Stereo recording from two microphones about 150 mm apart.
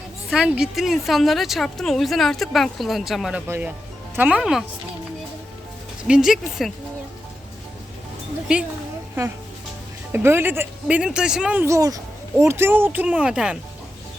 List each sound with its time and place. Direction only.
0.3 s speech: 5° right (ahead or behind)
3.4 s speech: 15° right (ahead or behind)
6.1 s speech: 5° right (ahead or behind)
10.1 s speech: 15° right (ahead or behind)
11.6 s speech: 20° right (ahead or behind); by 13.6 s 5° right (ahead or behind)